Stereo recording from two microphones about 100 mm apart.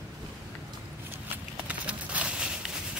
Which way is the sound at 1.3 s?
15° right (ahead or behind).